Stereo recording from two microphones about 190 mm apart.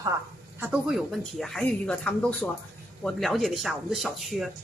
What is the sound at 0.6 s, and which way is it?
Speech, 5° right (ahead or behind).